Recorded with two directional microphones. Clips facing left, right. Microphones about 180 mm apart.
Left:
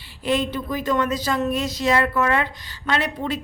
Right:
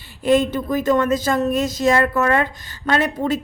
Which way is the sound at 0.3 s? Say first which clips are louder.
Right 6 dB; 45° right (ahead or behind).